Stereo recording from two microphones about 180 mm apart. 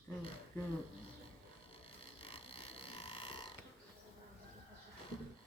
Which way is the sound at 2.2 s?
30° left (ahead or behind).